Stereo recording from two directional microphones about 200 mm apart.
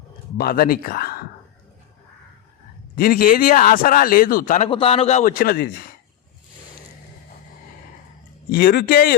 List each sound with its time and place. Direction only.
0.3 s speech: 50° left (ahead or behind)
2.9 s speech: 45° left (ahead or behind)
4.7 s a man's voice: 30° left (ahead or behind); by 5.7 s 50° left (ahead or behind)
8.4 s speech: 50° left (ahead or behind)